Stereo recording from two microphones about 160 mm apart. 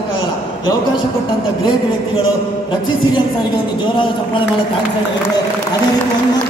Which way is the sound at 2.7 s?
30° left (ahead or behind).